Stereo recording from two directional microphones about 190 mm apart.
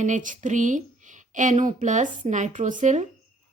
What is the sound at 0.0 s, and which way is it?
A woman's voice, 40° right (ahead or behind).